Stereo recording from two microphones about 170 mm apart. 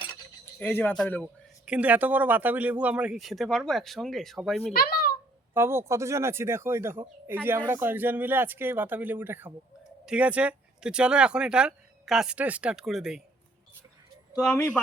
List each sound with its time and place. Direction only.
0.6 s speech: 10° left (ahead or behind)
1.6 s speech: 10° right (ahead or behind)
4.7 s speech: 65° left (ahead or behind)
5.5 s speech: 15° right (ahead or behind)
14.5 s speech: 10° left (ahead or behind)